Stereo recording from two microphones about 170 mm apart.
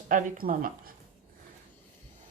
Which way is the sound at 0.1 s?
50° right (ahead or behind).